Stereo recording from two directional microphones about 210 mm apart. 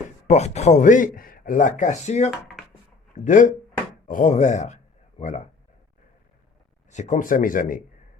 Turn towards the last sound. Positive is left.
turn(degrees=40)  # may be behind; listen again after turning